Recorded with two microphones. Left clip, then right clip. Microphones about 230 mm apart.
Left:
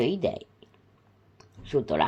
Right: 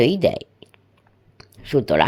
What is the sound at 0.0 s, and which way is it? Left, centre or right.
Speech, right.